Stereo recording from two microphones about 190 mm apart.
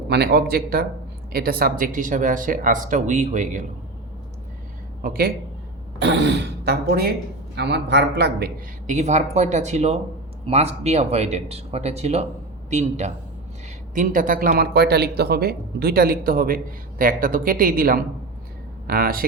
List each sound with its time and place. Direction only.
0.1 s speech: 60° right (ahead or behind); by 3.7 s 40° right (ahead or behind)
5.0 s speech: 50° right (ahead or behind)
6.0 s speech: 70° right (ahead or behind)
8.9 s speech: 35° right (ahead or behind)